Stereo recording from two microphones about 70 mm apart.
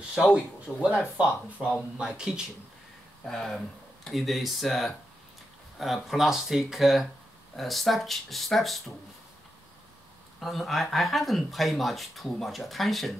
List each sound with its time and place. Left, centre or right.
0.1 s speech: centre
0.7 s speech: centre
3.3 s speech: centre
10.4 s speech: centre